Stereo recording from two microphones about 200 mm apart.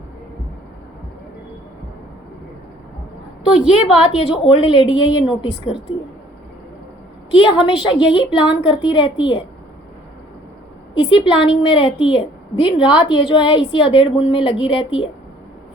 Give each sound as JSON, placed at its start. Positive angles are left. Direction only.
{"t": 3.7, "sound": "a woman's voice", "side_deg": 30}
{"t": 7.6, "sound": "a woman's voice", "side_deg": 25}
{"t": 10.9, "sound": "a woman's voice", "side_deg": 25}